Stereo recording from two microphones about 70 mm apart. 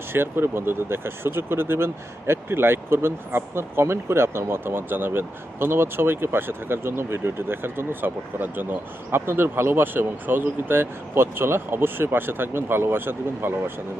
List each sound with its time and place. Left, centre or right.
0.1 s speech: right